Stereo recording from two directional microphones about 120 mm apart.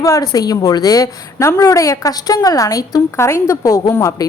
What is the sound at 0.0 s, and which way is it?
A woman's voice, 30° left (ahead or behind).